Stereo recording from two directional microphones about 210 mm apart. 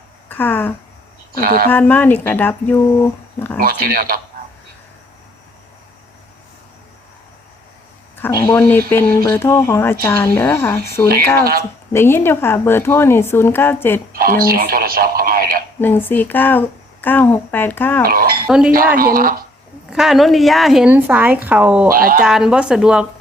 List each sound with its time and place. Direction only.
0.3 s speech: 10° left (ahead or behind)
1.3 s speech: 45° right (ahead or behind)
1.7 s speech: 10° left (ahead or behind)
3.6 s speech: 45° right (ahead or behind)
8.1 s speech: 10° left (ahead or behind)
14.1 s speech: 45° right (ahead or behind)
15.8 s speech: 10° left (ahead or behind)
18.0 s speech: 45° right (ahead or behind)
18.4 s speech: 5° right (ahead or behind)
18.9 s speech: 45° right (ahead or behind)
19.9 s speech: centre (ahead or behind)
21.8 s speech: 45° right (ahead or behind)
22.2 s speech: 5° right (ahead or behind)